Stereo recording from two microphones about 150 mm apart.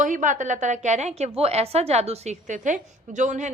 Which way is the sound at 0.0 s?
60° right (ahead or behind).